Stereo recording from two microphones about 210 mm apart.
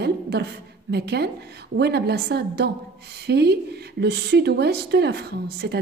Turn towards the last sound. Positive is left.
turn(degrees=-50)  # may be behind; listen again after turning